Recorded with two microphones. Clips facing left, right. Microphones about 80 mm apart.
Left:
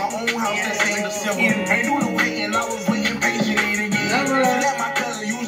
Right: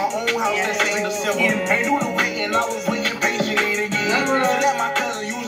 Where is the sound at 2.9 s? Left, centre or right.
Left.